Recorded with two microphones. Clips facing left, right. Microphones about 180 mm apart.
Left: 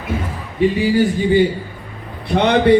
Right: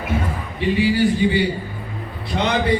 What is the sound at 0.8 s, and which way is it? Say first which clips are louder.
Speech: left 1 dB; 45° left (ahead or behind).